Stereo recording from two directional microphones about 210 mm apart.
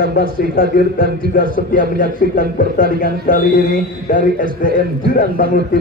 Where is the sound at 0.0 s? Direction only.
45° left (ahead or behind).